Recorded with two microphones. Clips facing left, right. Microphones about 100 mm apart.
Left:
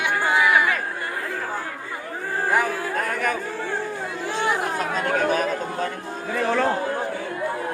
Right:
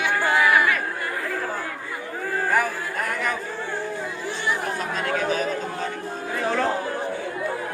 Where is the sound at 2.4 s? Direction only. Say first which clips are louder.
Left 1 dB; 20° left (ahead or behind).